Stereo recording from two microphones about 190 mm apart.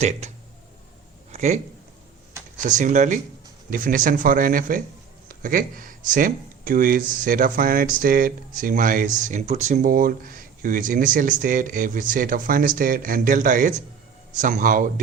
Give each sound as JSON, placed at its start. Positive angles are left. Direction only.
{"t": 0.0, "sound": "speech", "side_deg": -35}